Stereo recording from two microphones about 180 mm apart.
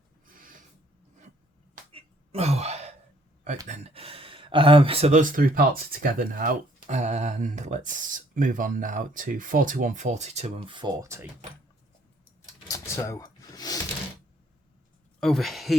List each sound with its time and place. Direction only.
0.3 s snort: 50° right (ahead or behind)
1.9 s a sound: 35° right (ahead or behind)
3.7 s speech: 35° right (ahead or behind)
5.2 s speech: 50° right (ahead or behind); by 11.3 s 15° right (ahead or behind)
12.6 s a sound: 15° left (ahead or behind)
15.2 s speech: centre (ahead or behind)